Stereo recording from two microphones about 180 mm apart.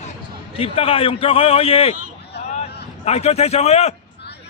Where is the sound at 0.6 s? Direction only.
30° left (ahead or behind).